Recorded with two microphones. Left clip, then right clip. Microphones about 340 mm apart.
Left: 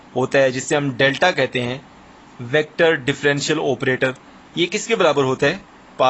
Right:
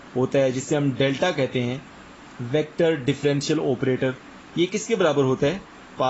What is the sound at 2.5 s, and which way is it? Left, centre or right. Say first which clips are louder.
A man's voice: left 5 dB; left.